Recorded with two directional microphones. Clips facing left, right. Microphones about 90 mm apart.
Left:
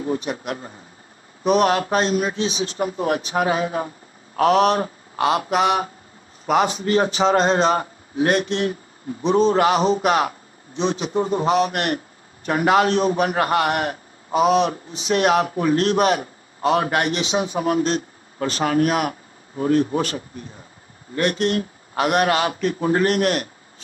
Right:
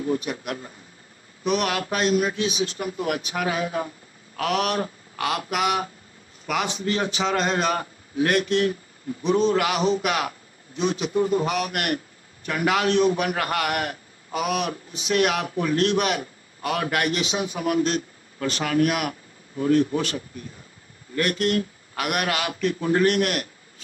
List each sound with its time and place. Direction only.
0.0 s a man's voice: 30° left (ahead or behind)
21.1 s a man's voice: 25° left (ahead or behind)